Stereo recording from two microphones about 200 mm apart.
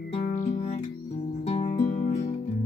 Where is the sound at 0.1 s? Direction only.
35° left (ahead or behind).